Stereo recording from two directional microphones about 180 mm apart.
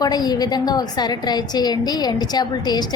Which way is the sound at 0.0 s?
20° left (ahead or behind).